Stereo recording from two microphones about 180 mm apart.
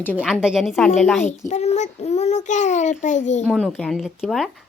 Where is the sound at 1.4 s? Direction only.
40° left (ahead or behind).